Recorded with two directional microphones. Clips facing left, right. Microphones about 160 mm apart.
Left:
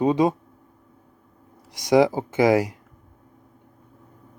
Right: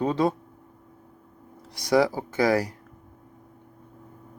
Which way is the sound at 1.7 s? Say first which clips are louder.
Left 4 dB; 15° left (ahead or behind).